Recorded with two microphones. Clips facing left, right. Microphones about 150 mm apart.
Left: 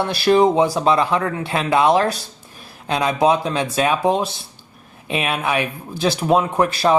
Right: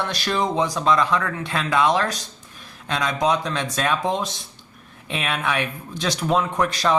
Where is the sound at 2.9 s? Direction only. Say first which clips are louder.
Left 5 dB; 30° left (ahead or behind).